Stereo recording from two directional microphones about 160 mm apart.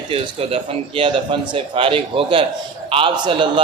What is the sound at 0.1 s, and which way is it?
Speech, 35° right (ahead or behind).